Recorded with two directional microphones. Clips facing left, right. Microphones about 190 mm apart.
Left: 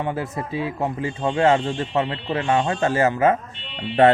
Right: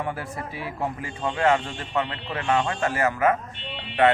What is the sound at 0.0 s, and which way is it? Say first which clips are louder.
A man's voice: left 5 dB; 25° left (ahead or behind).